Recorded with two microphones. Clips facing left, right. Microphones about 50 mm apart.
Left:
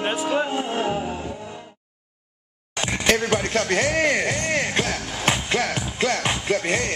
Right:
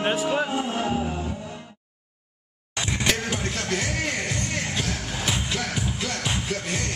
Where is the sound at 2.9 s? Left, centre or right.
Left.